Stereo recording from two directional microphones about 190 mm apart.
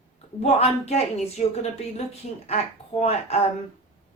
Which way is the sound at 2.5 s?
35° left (ahead or behind).